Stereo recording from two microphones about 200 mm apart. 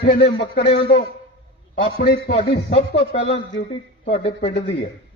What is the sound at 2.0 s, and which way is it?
Speech, 50° left (ahead or behind).